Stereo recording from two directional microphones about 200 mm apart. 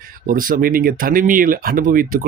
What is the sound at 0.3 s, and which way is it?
Speech, 45° right (ahead or behind).